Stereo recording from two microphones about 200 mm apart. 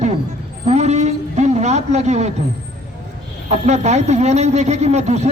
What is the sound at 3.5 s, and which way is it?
A man's voice, 35° right (ahead or behind).